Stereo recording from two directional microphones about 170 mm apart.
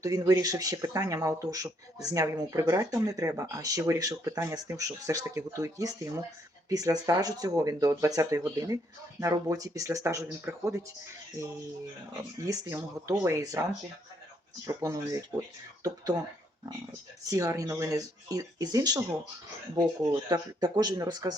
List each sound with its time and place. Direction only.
0.0 s speech: 20° right (ahead or behind)
14.7 s speech: 15° right (ahead or behind)
17.2 s speech: 20° right (ahead or behind)